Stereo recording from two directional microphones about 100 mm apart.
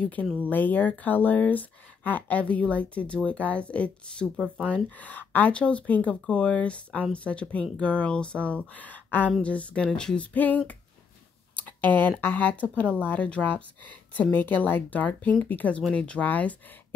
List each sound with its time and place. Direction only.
0.0 s speech: 15° left (ahead or behind)
11.8 s speech: 15° left (ahead or behind)